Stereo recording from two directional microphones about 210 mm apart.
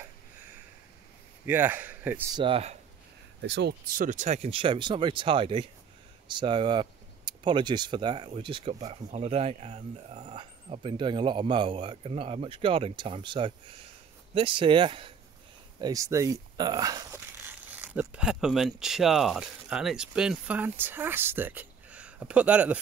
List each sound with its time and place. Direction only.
1.4 s a man's voice: 10° right (ahead or behind)
2.3 s speech: 25° right (ahead or behind)
3.3 s speech: 55° right (ahead or behind)
3.9 s speech: 40° right (ahead or behind); by 22.8 s 5° right (ahead or behind)